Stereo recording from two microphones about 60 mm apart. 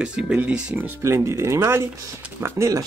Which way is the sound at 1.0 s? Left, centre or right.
Right.